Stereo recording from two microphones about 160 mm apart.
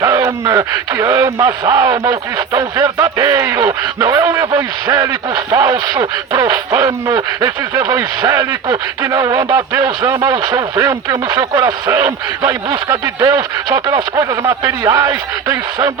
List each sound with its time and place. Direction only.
0.0 s speech: 20° right (ahead or behind)